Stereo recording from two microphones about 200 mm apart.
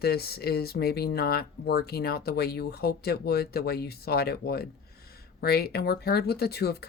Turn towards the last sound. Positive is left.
turn(degrees=55)  # may be behind; listen again after turning